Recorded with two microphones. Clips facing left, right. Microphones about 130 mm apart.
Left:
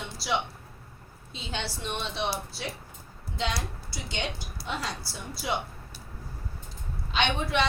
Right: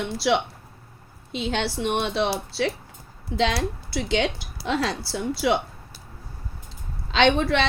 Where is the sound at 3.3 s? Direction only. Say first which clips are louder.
Right 9 dB; 75° right (ahead or behind).